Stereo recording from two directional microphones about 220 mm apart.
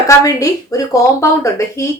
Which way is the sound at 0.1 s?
15° left (ahead or behind).